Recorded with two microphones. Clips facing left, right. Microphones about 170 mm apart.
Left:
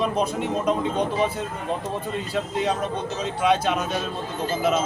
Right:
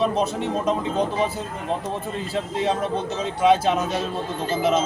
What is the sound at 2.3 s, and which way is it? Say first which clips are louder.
Speech: right 1 dB; 25° right (ahead or behind).